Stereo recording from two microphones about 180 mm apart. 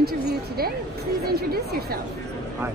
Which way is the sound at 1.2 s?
60° right (ahead or behind).